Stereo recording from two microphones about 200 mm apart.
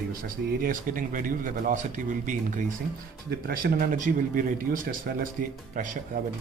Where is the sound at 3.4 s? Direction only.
45° right (ahead or behind).